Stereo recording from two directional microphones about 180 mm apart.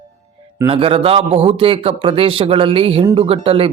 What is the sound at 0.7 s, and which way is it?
Speech, 30° right (ahead or behind).